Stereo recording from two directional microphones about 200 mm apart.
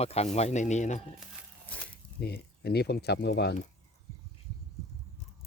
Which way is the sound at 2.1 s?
50° left (ahead or behind).